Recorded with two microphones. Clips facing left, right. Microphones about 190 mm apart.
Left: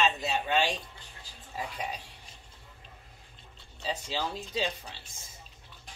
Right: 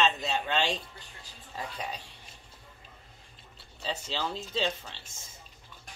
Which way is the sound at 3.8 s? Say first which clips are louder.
Left 1 dB; 10° left (ahead or behind).